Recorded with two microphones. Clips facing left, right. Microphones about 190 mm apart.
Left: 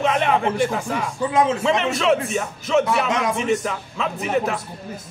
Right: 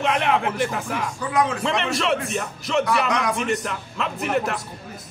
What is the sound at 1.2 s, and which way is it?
Speech, 25° left (ahead or behind).